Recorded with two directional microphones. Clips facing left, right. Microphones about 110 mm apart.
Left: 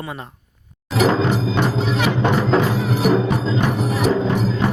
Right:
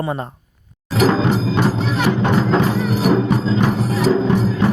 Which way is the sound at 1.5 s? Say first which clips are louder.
Right 1 dB; centre (ahead or behind).